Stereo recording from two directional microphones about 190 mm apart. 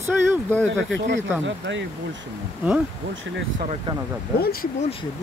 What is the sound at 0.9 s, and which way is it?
Speech, 70° right (ahead or behind).